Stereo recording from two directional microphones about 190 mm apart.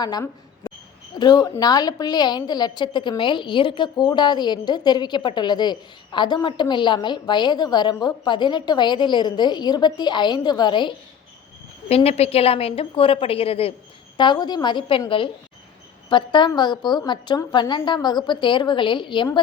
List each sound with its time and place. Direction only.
0.0 s a woman's voice: 20° left (ahead or behind)